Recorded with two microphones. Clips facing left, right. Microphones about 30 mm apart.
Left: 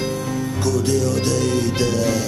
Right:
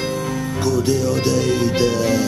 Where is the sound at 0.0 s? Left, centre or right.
Centre.